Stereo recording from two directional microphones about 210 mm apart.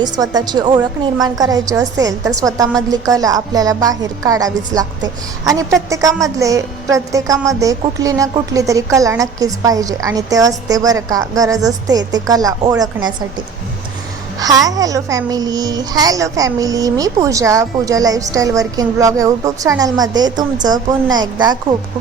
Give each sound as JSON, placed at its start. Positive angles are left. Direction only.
{"t": 0.0, "sound": "a woman's voice", "side_deg": -20}
{"t": 5.9, "sound": "a woman's voice", "side_deg": -15}
{"t": 14.3, "sound": "a woman's voice", "side_deg": -15}